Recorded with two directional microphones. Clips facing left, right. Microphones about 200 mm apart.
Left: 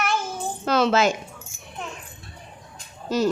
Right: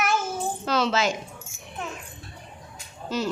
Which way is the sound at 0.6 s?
55° left (ahead or behind).